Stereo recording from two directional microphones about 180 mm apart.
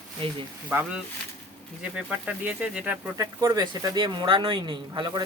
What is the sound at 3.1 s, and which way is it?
Speech, 20° right (ahead or behind).